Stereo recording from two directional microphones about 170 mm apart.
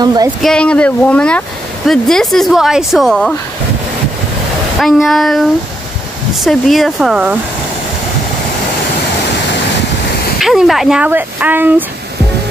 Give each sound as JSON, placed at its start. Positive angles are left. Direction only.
{"t": 0.0, "sound": "speech", "side_deg": -25}
{"t": 0.4, "sound": "speech", "side_deg": 5}
{"t": 4.7, "sound": "speech", "side_deg": 0}
{"t": 10.4, "sound": "speech", "side_deg": 0}